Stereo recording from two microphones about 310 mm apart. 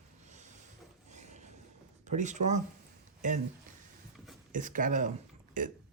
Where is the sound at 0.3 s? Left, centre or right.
Right.